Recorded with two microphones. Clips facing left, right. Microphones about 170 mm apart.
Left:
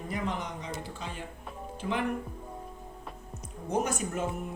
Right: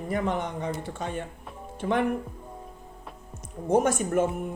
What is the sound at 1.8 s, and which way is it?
Speech, 45° right (ahead or behind).